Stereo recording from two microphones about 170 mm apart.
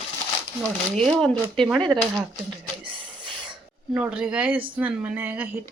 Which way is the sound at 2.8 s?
30° right (ahead or behind).